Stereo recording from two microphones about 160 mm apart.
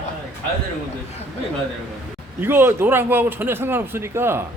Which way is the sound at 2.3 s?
15° right (ahead or behind).